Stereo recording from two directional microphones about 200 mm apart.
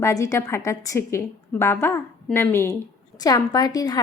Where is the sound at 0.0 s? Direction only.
15° left (ahead or behind).